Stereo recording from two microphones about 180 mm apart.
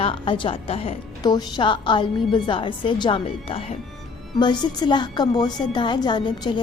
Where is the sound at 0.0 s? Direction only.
30° left (ahead or behind).